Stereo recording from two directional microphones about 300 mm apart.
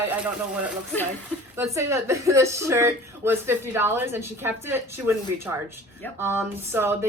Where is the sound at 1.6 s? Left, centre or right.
Centre.